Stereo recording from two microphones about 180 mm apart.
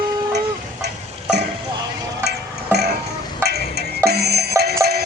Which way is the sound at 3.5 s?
65° right (ahead or behind).